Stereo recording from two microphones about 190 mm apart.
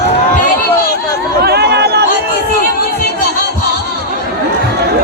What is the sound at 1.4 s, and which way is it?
Chatter, 60° right (ahead or behind).